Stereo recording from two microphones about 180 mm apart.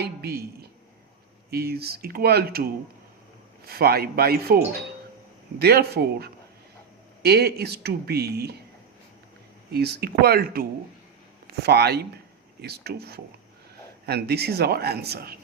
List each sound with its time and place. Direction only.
0.0 s speech: 60° right (ahead or behind)
9.7 s speech: 60° right (ahead or behind)